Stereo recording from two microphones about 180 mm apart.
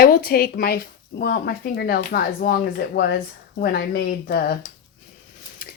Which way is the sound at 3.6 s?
60° left (ahead or behind).